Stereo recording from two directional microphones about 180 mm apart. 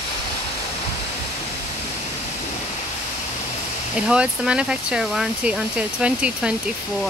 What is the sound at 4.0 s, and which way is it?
Speech, 5° right (ahead or behind).